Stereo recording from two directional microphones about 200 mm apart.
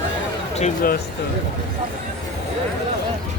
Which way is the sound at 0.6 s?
45° left (ahead or behind).